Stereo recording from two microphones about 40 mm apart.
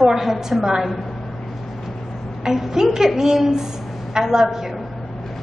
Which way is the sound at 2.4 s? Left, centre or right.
Centre.